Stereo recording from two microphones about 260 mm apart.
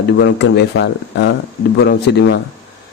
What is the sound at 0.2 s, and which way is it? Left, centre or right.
A man's voice, left.